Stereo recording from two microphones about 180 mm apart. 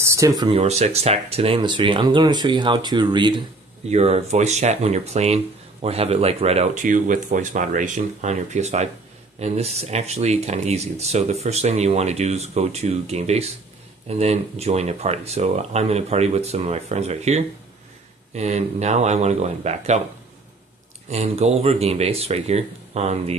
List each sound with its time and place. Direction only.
0.0 s a sound: 15° right (ahead or behind)
0.5 s speech: 35° right (ahead or behind)
3.9 s speech: 35° right (ahead or behind)
21.1 s speech: 35° right (ahead or behind)